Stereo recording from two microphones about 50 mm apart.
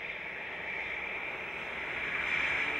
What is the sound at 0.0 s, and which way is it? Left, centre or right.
Vehicle, centre.